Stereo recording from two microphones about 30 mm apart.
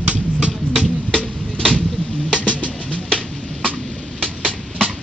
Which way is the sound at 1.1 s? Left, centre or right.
Left.